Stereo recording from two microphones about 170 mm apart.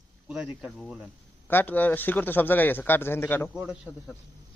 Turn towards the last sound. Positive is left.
turn(degrees=-5)  # may be behind; listen again after turning